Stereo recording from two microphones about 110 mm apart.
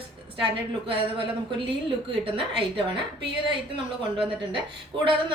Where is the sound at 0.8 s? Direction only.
50° right (ahead or behind).